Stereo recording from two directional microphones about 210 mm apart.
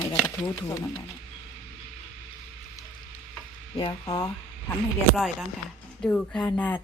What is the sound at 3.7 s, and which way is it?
Speech, 20° left (ahead or behind).